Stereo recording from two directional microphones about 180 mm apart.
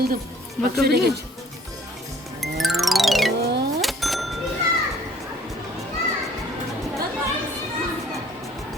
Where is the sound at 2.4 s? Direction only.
Centre (ahead or behind).